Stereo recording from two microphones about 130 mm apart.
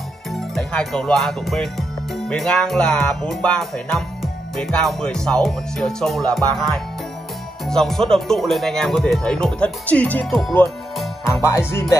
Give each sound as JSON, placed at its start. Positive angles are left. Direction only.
{"t": 0.4, "sound": "speech", "side_deg": 5}
{"t": 11.4, "sound": "speech", "side_deg": 20}